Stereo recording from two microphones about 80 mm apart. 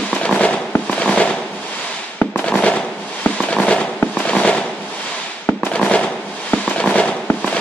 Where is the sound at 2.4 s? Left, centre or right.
Centre.